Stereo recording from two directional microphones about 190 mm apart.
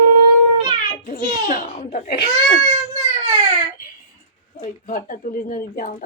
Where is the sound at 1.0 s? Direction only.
45° left (ahead or behind).